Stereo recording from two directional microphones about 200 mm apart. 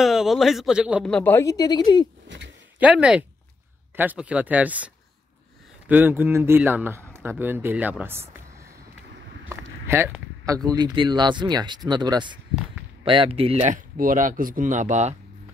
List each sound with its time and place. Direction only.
0.0 s a man's voice: centre (ahead or behind)
1.0 s speech: 5° left (ahead or behind)
2.2 s a sound: 60° right (ahead or behind)
2.8 s speech: 5° right (ahead or behind)
9.5 s speech: 10° right (ahead or behind); by 13.7 s 30° right (ahead or behind)
13.9 s speech: 40° right (ahead or behind)